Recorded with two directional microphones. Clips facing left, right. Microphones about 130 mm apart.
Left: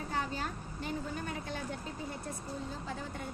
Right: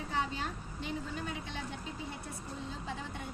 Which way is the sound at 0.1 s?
45° left (ahead or behind).